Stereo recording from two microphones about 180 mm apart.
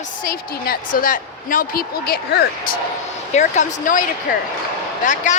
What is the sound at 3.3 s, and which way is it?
Speech, 40° left (ahead or behind).